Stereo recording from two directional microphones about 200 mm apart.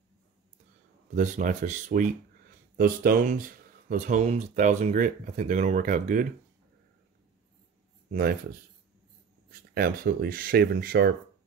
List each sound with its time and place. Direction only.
1.1 s speech: 40° right (ahead or behind)
8.1 s speech: 45° right (ahead or behind)
9.5 s speech: 50° right (ahead or behind)